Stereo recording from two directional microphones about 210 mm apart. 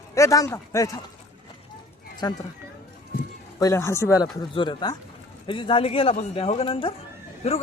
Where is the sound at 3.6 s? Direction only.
15° left (ahead or behind).